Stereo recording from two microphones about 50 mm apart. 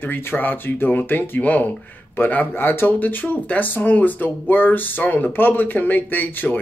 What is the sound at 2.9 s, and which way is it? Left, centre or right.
Speech, left.